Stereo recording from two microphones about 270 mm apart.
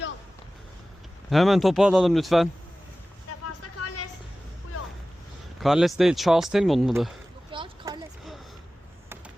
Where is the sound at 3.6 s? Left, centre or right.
Left.